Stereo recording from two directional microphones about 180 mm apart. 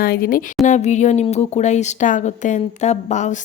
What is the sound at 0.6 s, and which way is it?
Speech, 40° left (ahead or behind).